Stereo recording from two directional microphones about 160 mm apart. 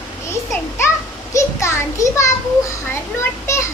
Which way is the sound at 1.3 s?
20° left (ahead or behind).